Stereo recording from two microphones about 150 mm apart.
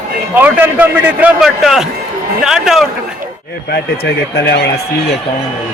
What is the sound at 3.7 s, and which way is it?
Speech, 90° left.